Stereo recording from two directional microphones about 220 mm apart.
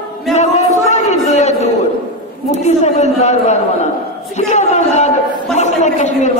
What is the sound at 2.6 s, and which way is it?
A man's voice, 30° left (ahead or behind).